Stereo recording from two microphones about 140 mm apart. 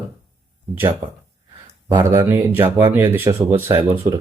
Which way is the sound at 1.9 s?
20° right (ahead or behind).